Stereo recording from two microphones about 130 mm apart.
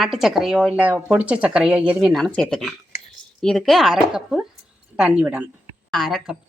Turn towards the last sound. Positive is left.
turn(degrees=-5)  # may be behind; listen again after turning